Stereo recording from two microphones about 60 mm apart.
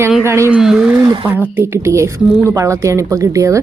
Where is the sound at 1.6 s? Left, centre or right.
Right.